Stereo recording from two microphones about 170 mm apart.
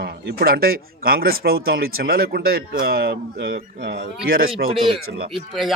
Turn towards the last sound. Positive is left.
turn(degrees=0)  # may be behind; listen again after turning